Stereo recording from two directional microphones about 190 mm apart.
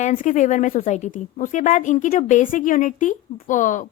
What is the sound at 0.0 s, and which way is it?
A woman's voice, 40° left (ahead or behind).